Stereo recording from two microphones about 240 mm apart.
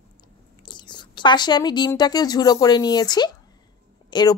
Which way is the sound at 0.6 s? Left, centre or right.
Centre.